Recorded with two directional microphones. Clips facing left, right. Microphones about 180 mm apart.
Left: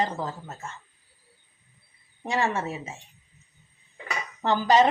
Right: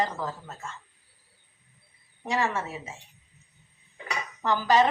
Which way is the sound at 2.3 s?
25° left (ahead or behind).